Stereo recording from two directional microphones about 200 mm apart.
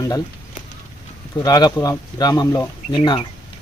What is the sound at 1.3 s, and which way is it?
Speech, 20° left (ahead or behind).